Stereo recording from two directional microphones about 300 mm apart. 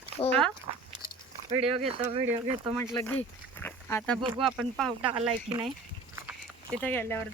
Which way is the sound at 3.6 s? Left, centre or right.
Centre.